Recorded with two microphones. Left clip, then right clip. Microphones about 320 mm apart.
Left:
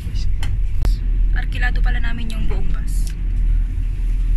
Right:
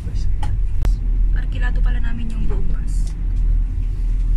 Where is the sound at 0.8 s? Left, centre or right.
Centre.